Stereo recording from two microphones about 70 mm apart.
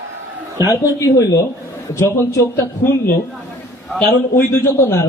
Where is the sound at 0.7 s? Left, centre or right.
Left.